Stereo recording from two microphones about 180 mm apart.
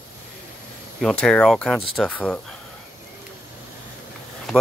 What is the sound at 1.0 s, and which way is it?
Speech, 5° left (ahead or behind).